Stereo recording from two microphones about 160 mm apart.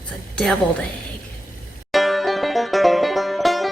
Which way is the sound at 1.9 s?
Centre (ahead or behind).